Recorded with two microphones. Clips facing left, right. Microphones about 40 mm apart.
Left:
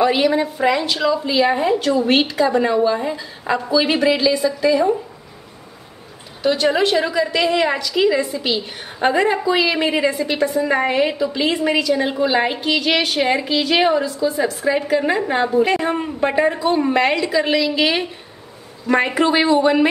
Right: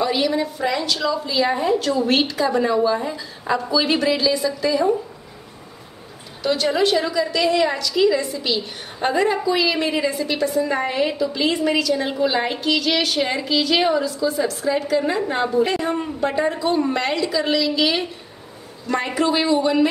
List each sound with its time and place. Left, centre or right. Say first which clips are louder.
0.0 s a woman's voice: left 4 dB; left
6.4 s a woman's voice: left 2 dB; centre
15.9 s a woman's voice: left 2 dB; left